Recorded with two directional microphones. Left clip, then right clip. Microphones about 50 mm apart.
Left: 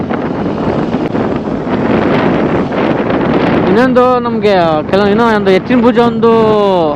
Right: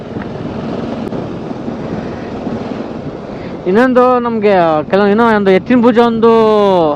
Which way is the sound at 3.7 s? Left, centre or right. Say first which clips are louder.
Right 2 dB; centre.